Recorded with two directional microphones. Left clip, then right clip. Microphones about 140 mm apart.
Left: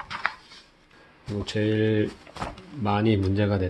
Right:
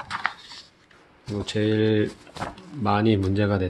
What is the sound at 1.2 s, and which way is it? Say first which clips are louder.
Speech: right 2 dB; 15° right (ahead or behind).